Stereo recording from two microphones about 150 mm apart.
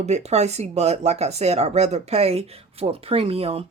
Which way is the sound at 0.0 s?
45° right (ahead or behind).